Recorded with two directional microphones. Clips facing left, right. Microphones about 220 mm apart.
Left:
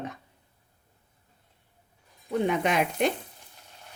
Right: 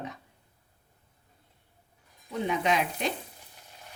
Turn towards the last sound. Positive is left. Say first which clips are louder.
# left 3 dB
turn(degrees=55)  # may be behind; listen again after turning